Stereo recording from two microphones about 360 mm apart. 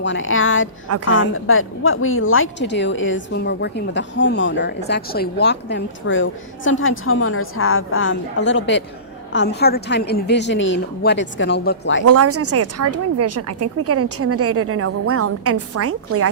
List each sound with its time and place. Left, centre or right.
0.0 s a woman's voice: left
12.0 s a woman's voice: right